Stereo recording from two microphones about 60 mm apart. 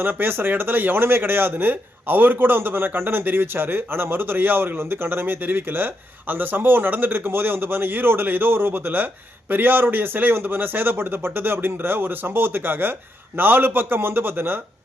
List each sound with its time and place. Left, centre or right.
0.0 s speech: right